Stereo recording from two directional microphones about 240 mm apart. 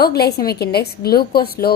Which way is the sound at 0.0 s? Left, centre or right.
Left.